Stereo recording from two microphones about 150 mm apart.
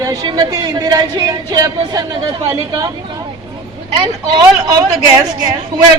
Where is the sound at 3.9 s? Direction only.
25° right (ahead or behind).